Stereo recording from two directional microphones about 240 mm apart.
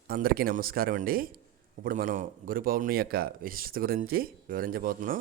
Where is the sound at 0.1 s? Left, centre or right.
Right.